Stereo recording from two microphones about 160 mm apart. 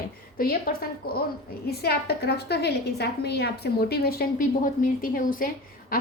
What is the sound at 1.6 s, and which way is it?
A woman's voice, 80° left.